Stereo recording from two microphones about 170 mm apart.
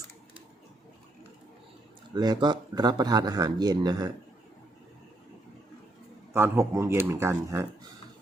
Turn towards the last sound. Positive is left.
turn(degrees=-15)  # may be behind; listen again after turning